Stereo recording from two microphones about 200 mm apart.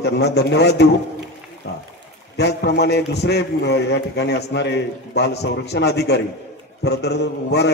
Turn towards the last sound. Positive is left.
turn(degrees=55)  # may be behind; listen again after turning